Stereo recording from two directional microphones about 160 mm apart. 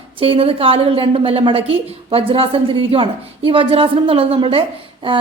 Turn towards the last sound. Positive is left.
turn(degrees=-35)  # may be behind; listen again after turning